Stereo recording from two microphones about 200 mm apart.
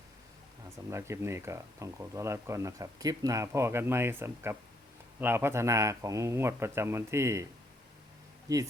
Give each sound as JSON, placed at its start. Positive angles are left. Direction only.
{"t": 0.9, "sound": "speech", "side_deg": -15}